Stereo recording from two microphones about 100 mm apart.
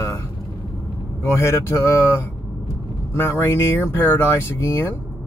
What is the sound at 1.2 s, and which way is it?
Speech, 25° left (ahead or behind).